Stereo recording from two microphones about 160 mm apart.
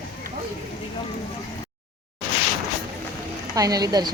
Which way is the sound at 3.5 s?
20° right (ahead or behind).